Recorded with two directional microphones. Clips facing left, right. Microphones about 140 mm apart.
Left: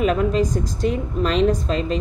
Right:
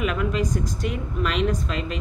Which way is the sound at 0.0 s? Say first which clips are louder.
Left 6 dB; 35° left (ahead or behind).